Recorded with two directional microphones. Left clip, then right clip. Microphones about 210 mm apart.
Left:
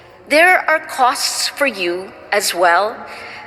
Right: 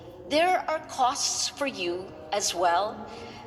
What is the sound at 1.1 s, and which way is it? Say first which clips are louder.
Speech: left 10 dB; 30° left (ahead or behind).